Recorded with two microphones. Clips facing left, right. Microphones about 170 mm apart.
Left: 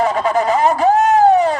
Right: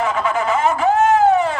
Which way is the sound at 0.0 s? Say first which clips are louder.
Left 4 dB; 35° left (ahead or behind).